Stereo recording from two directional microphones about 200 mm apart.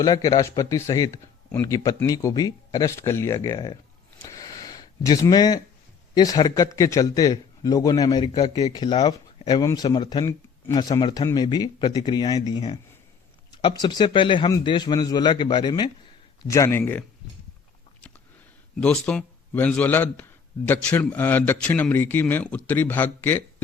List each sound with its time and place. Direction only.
0.0 s a man's voice: 20° left (ahead or behind)
4.2 s a sound: 15° left (ahead or behind)
6.1 s a man's voice: 20° left (ahead or behind)
18.8 s a man's voice: 5° left (ahead or behind)